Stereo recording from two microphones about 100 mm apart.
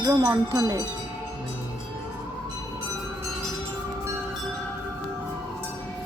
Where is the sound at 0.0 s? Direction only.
40° right (ahead or behind).